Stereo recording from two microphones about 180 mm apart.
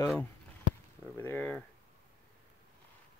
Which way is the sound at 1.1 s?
10° left (ahead or behind).